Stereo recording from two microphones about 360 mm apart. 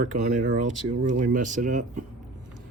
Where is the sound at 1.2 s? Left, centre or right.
Right.